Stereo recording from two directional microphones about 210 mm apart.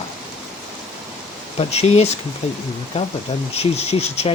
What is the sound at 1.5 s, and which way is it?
Speech, 30° left (ahead or behind).